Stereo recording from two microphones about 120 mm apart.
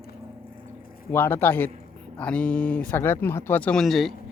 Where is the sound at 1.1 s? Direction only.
20° left (ahead or behind).